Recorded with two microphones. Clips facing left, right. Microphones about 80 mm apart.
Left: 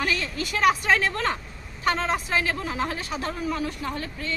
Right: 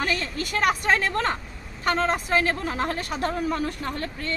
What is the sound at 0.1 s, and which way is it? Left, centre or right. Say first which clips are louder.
A woman's voice: right 1 dB; right.